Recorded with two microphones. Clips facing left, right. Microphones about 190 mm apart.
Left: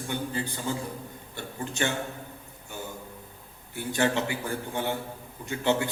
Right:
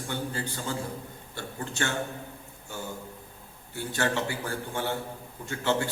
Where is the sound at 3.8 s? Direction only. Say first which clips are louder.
Left 2 dB; 15° left (ahead or behind).